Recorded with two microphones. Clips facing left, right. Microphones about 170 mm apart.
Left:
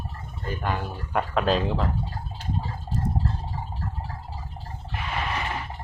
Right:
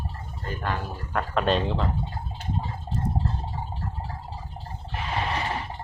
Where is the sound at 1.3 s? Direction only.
Centre (ahead or behind).